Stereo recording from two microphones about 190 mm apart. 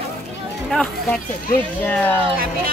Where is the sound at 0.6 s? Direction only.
5° left (ahead or behind).